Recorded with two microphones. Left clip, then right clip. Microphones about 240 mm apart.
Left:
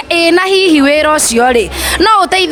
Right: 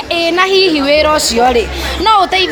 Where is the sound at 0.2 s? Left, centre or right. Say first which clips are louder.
Left 1 dB; left.